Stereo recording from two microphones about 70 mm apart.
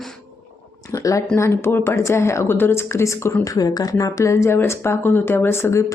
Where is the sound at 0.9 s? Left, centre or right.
Left.